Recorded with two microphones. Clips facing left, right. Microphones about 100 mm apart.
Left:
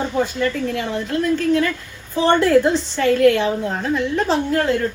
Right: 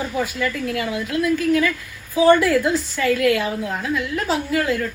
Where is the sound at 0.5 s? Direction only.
5° right (ahead or behind).